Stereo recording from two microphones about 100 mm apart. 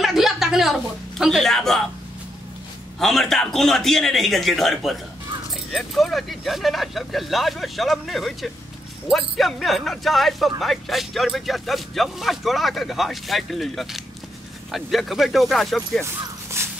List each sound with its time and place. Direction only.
0.0 s a sound: 5° right (ahead or behind)
3.0 s speech: 5° left (ahead or behind)
16.0 s speech: 25° right (ahead or behind)